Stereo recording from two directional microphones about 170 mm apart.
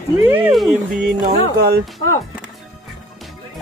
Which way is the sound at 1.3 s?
70° right (ahead or behind).